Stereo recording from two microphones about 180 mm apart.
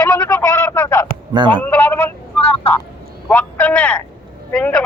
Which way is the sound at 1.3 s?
25° right (ahead or behind).